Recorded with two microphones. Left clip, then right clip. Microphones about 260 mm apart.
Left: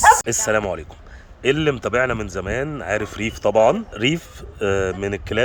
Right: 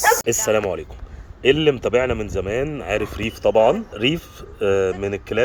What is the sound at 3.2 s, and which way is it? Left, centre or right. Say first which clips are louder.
Speech: even; left.